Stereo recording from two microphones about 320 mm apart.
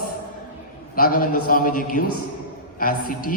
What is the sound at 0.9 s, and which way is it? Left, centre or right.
A man's voice, left.